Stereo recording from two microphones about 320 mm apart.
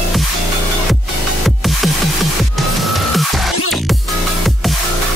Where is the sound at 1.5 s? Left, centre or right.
Centre.